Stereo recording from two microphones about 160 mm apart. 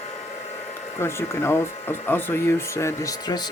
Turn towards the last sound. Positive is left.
turn(degrees=20)  # may be behind; listen again after turning